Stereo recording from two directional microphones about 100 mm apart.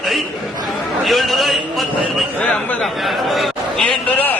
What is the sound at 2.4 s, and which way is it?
Speech, 10° left (ahead or behind).